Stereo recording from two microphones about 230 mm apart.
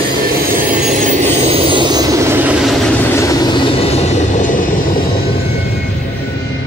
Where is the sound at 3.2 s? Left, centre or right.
Centre.